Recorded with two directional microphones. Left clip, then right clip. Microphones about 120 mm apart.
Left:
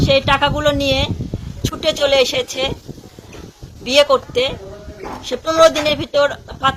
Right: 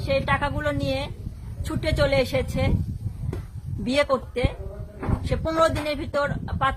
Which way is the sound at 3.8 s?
25° left (ahead or behind).